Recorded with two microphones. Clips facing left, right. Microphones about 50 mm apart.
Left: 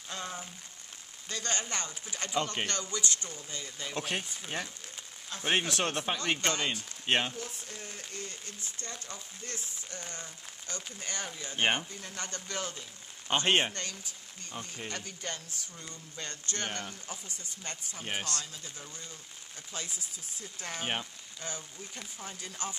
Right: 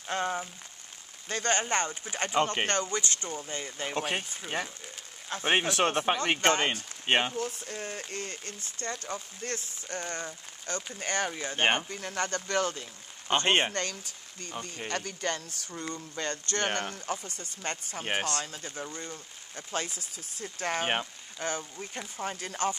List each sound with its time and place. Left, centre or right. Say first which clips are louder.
0.1 s speech: right 9 dB; right
4.1 s speech: right 3 dB; centre; by 6.8 s right
7.1 s speech: right 3 dB; centre
7.3 s speech: right 8 dB; right
11.9 s speech: right 9 dB; right
13.5 s speech: right 1 dB; centre
14.9 s speech: right 10 dB; right